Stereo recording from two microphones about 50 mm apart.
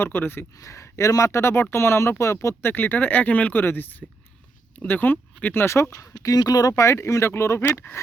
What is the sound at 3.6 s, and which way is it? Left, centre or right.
Speech, left.